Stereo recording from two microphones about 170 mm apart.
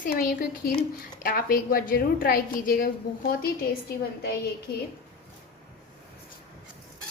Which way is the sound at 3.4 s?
65° left (ahead or behind).